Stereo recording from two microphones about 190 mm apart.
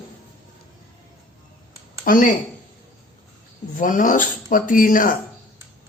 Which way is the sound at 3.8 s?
45° left (ahead or behind).